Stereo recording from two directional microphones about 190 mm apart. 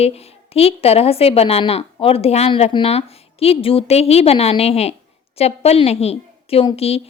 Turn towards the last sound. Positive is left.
turn(degrees=30)  # may be behind; listen again after turning